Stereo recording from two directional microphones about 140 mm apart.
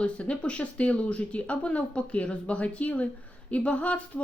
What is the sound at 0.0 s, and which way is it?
Speech, 10° left (ahead or behind).